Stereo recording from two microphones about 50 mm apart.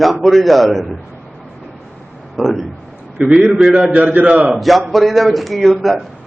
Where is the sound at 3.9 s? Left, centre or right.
Right.